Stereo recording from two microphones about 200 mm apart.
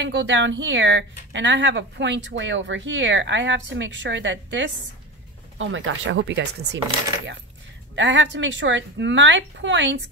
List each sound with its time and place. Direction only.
0.0 s speech: 60° right (ahead or behind)
7.9 s speech: 65° right (ahead or behind)